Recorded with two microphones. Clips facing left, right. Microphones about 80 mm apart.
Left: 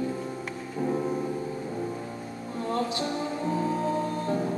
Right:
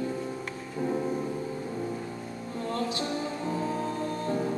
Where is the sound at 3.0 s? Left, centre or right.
Centre.